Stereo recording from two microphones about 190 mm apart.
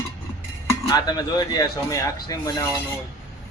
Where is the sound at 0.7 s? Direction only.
20° left (ahead or behind).